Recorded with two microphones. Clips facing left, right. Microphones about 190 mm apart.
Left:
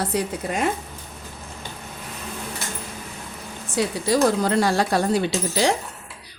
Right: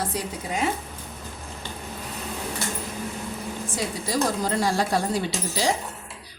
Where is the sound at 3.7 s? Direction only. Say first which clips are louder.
Left 6 dB; 70° left (ahead or behind).